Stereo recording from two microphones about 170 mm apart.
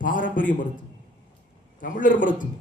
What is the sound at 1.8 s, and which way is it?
Speech, 50° left (ahead or behind).